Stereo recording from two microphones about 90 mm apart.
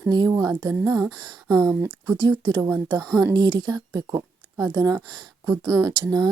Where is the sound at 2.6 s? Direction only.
30° right (ahead or behind).